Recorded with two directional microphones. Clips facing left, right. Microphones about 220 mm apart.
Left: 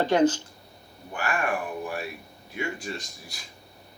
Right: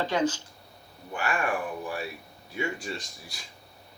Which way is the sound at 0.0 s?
50° left (ahead or behind).